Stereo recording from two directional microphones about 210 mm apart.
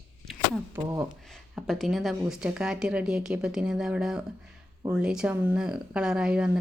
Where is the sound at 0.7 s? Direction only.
15° right (ahead or behind).